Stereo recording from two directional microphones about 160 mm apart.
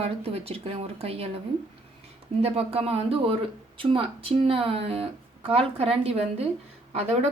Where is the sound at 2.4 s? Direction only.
40° right (ahead or behind).